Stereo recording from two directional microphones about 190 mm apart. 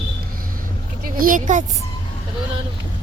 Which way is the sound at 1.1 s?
50° right (ahead or behind).